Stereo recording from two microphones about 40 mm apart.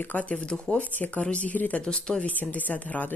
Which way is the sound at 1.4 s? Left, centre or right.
Left.